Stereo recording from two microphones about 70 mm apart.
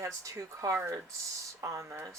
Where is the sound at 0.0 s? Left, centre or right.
Right.